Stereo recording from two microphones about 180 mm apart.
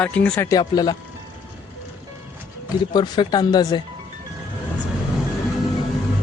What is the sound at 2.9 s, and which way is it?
Speech, 25° left (ahead or behind).